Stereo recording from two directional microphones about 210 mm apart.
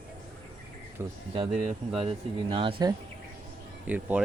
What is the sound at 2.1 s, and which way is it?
Speech, 25° right (ahead or behind).